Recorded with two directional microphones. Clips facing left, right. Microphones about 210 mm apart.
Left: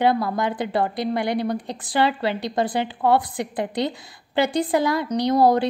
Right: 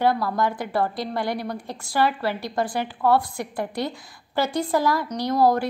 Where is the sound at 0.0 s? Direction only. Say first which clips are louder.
Left 1 dB; 20° left (ahead or behind).